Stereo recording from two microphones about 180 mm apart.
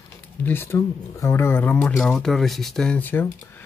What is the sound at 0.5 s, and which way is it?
Speech, 10° left (ahead or behind).